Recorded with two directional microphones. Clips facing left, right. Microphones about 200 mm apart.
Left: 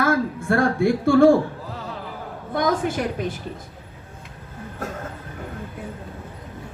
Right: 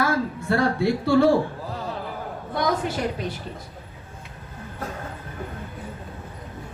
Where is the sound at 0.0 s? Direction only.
50° left (ahead or behind).